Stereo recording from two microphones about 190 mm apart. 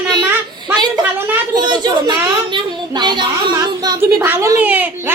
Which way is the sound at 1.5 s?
20° right (ahead or behind).